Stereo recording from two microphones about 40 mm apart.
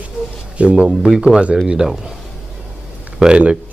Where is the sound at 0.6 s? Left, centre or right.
Right.